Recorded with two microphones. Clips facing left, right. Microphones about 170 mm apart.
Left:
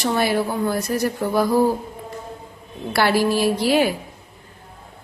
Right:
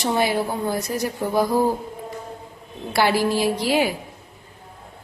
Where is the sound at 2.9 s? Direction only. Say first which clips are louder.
Left 1 dB; 15° right (ahead or behind).